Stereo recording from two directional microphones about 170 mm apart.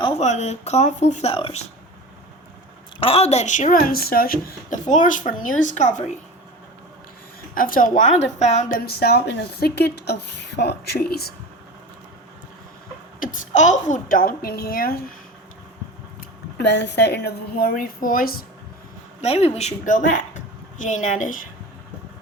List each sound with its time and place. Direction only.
0.0 s speech: 40° left (ahead or behind)
3.0 s speech: 35° left (ahead or behind)
7.5 s speech: 55° left (ahead or behind)
8.8 s a woman's voice: 65° left (ahead or behind)
13.1 s a woman's voice: 50° left (ahead or behind)
16.6 s a woman's voice: 85° left; by 18.4 s 60° left (ahead or behind)
19.2 s a woman's voice: 35° left (ahead or behind)